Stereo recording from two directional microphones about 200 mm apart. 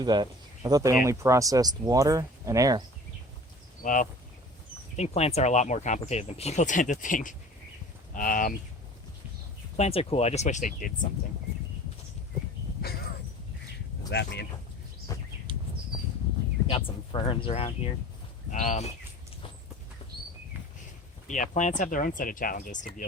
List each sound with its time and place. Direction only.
0.0 s speech: 20° right (ahead or behind)
3.8 s speech: 40° left (ahead or behind)
9.7 s speech: 30° left (ahead or behind)
14.1 s speech: 55° left (ahead or behind)
15.1 s a sound: 15° left (ahead or behind)
16.7 s speech: 25° left (ahead or behind)
21.2 s speech: 40° left (ahead or behind)